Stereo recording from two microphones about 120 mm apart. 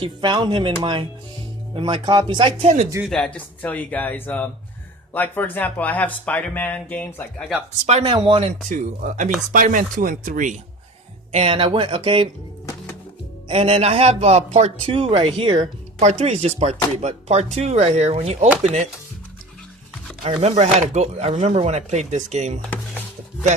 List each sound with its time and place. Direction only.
0.0 s speech: 40° right (ahead or behind)
3.1 s speech: 10° left (ahead or behind)
7.9 s speech: 60° right (ahead or behind)
8.1 s speech: 40° right (ahead or behind)
8.4 s speech: 75° right (ahead or behind)
11.3 s speech: 55° right (ahead or behind)
13.5 s speech: 55° right (ahead or behind)
16.0 s speech: 65° right (ahead or behind)
20.2 s speech: 65° right (ahead or behind)